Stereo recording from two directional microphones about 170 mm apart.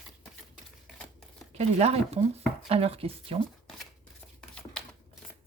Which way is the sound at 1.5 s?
40° right (ahead or behind).